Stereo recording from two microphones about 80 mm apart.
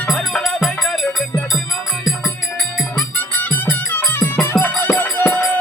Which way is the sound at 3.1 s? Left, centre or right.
Left.